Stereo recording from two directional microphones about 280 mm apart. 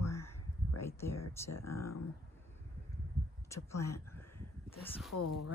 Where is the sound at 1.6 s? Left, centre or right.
Left.